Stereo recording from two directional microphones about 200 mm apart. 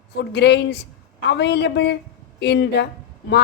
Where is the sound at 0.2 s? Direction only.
60° left (ahead or behind).